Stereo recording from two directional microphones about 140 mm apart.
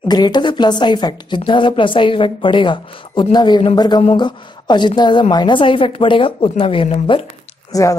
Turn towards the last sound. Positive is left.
turn(degrees=25)  # may be behind; listen again after turning